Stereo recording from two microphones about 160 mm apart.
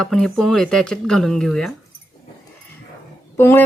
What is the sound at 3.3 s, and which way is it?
Speech, 15° left (ahead or behind).